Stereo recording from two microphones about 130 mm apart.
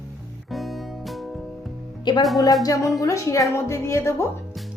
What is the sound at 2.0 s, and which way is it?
Music, 35° left (ahead or behind).